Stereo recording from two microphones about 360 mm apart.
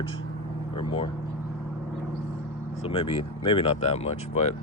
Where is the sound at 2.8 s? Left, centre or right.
Centre.